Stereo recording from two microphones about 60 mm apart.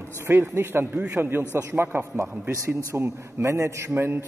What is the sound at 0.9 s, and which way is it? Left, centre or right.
Speech, centre.